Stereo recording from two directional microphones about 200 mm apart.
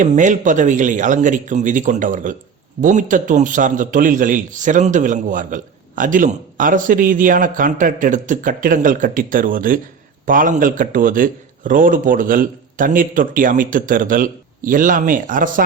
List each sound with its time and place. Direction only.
0.0 s a man's voice: 40° right (ahead or behind)